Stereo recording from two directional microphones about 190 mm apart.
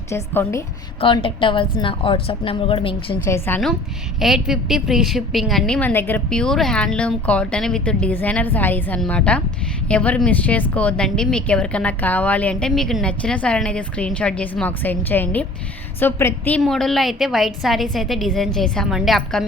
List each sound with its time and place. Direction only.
0.1 s a woman's voice: 15° left (ahead or behind)
1.0 s a woman's voice: 25° left (ahead or behind)
3.2 s a woman's voice: 10° left (ahead or behind)
4.2 s a woman's voice: centre (ahead or behind)